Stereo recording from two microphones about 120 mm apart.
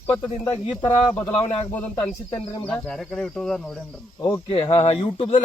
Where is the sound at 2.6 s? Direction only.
10° left (ahead or behind).